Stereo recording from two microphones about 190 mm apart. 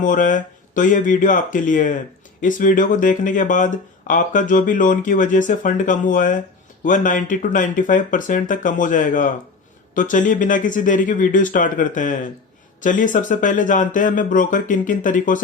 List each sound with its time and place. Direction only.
0.0 s speech: 45° left (ahead or behind)